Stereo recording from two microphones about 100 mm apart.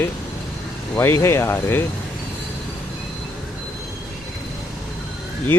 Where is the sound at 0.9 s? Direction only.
25° left (ahead or behind).